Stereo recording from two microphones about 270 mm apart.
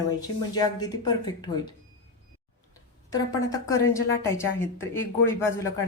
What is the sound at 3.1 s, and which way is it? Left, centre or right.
A woman's voice, centre.